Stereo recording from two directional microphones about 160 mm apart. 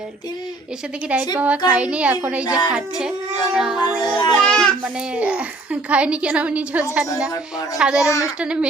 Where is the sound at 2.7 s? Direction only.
5° right (ahead or behind).